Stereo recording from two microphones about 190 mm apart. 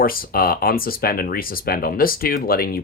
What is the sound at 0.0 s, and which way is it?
Speech, 50° left (ahead or behind).